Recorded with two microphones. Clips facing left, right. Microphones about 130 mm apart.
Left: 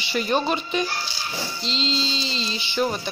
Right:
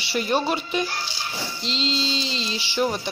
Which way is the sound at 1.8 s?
65° right (ahead or behind).